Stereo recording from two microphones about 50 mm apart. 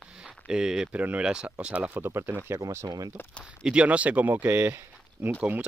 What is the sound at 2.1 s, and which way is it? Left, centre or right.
Speech, right.